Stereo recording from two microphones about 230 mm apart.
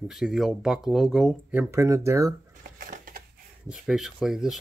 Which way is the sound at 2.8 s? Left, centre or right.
Right.